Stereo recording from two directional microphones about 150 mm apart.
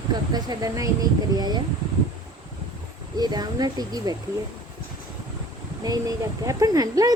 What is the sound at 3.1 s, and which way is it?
Speech, 25° right (ahead or behind).